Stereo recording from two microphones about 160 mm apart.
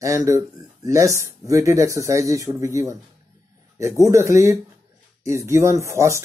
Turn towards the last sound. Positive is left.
turn(degrees=-20)  # may be behind; listen again after turning